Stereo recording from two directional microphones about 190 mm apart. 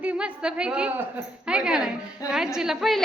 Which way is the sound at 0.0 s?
5° right (ahead or behind).